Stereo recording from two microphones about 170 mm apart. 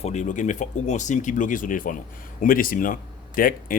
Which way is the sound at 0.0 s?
45° left (ahead or behind).